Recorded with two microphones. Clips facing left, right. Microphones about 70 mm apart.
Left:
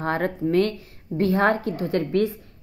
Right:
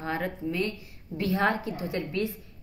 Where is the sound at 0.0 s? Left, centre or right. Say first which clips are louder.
Left 7 dB; left.